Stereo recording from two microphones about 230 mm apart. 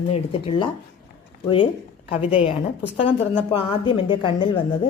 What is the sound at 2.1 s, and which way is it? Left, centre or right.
A woman's voice, left.